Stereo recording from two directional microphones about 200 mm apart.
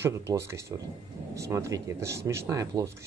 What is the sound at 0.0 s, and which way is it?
Speech, 15° right (ahead or behind).